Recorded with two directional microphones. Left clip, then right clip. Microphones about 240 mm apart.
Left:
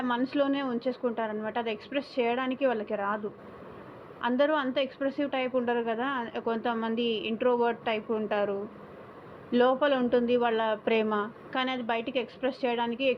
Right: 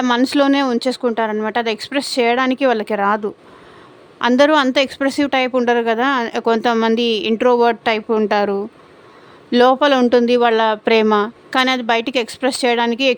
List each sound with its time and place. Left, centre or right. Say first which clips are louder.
0.0 s a woman's voice: right 13 dB; right
4.2 s a woman's voice: right 14 dB; right